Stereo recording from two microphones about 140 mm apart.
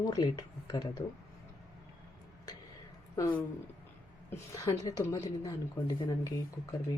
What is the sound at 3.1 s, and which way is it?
A woman's voice, 20° left (ahead or behind).